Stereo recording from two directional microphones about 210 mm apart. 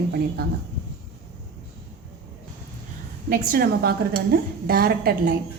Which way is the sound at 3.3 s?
45° right (ahead or behind).